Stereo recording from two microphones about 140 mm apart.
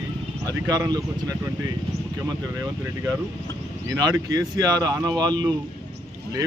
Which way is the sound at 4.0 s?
30° right (ahead or behind).